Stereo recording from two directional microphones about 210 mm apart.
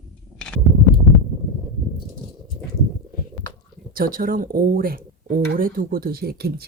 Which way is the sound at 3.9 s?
40° right (ahead or behind).